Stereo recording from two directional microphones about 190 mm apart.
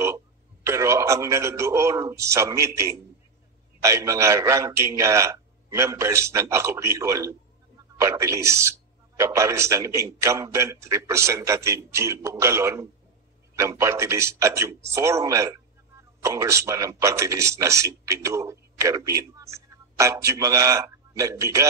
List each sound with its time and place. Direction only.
0.7 s a man's voice: 15° right (ahead or behind)